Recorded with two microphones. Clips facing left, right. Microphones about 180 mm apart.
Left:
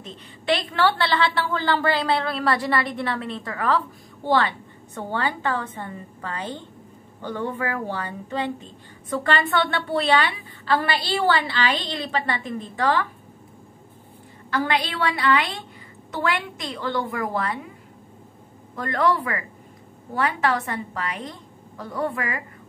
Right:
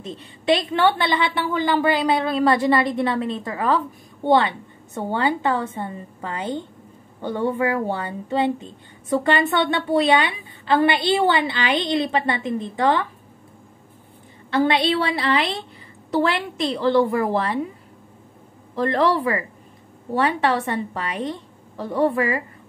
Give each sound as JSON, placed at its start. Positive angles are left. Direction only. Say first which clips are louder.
{"t": 0.5, "sound": "a woman's voice", "louder": "right 3 dB", "side_deg": -20}
{"t": 14.5, "sound": "a woman's voice", "louder": "right 6 dB", "side_deg": -25}
{"t": 18.8, "sound": "a woman's voice", "louder": "right 3 dB", "side_deg": -30}